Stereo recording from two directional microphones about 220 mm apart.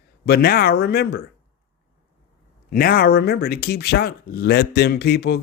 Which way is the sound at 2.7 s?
45° left (ahead or behind).